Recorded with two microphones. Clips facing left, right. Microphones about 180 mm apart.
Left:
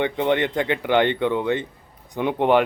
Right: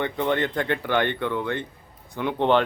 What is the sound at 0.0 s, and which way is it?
Speech, 20° left (ahead or behind).